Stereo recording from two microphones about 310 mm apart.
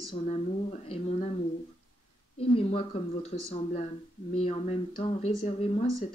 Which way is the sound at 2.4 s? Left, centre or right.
Centre.